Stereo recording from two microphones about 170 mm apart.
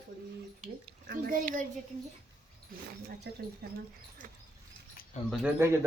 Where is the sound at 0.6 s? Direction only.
50° right (ahead or behind).